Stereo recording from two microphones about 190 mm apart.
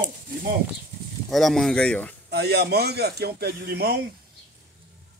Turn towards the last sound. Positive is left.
turn(degrees=-60)  # may be behind; listen again after turning